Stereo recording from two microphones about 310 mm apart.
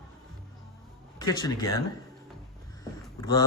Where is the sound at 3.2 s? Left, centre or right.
Centre.